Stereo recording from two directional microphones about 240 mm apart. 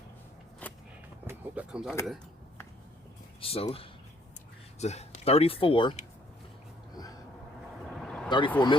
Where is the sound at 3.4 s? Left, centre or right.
Left.